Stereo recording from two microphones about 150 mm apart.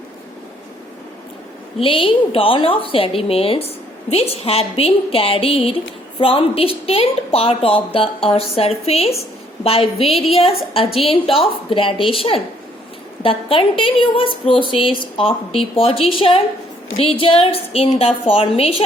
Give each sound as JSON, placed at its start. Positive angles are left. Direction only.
{"t": 1.8, "sound": "a woman's voice", "side_deg": 35}